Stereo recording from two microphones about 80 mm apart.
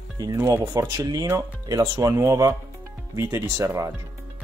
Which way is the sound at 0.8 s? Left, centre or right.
Right.